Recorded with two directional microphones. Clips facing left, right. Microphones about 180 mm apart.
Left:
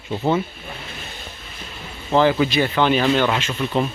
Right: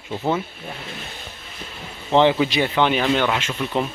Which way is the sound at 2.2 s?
20° right (ahead or behind).